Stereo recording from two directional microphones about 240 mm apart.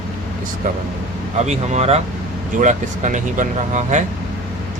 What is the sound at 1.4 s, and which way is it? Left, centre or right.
Speech, right.